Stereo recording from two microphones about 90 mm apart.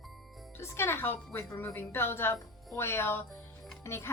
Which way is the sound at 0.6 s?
25° left (ahead or behind).